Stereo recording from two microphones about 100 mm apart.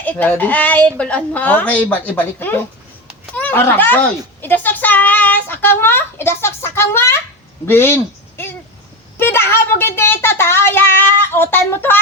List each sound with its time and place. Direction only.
0.0 s a woman's voice: 15° left (ahead or behind)
9.1 s speech: 25° left (ahead or behind)